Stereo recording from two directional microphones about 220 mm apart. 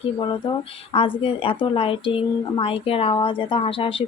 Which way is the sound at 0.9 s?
25° left (ahead or behind).